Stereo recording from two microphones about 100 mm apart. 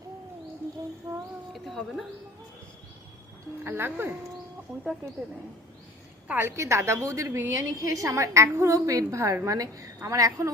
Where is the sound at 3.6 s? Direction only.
20° right (ahead or behind).